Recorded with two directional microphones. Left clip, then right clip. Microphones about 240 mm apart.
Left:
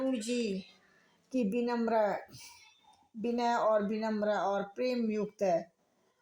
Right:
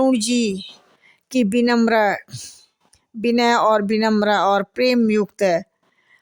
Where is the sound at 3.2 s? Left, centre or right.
Right.